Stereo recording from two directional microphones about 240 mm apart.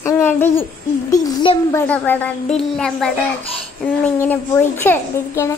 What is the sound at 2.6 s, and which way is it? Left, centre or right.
Music, centre.